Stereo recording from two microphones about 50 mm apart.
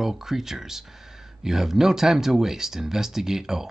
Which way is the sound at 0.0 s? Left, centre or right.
Centre.